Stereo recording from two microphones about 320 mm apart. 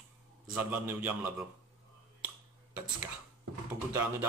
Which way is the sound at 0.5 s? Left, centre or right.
Centre.